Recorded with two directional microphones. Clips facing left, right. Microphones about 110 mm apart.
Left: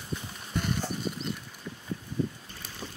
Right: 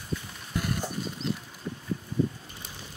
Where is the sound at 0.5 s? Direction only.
5° right (ahead or behind).